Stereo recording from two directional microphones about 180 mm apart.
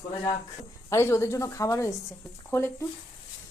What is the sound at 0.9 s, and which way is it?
Speech, 15° left (ahead or behind).